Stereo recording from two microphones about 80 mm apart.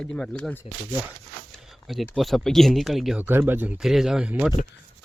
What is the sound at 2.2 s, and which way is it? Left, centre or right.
Speech, centre.